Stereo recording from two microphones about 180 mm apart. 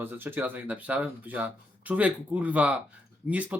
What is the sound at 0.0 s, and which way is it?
Speech, 10° right (ahead or behind).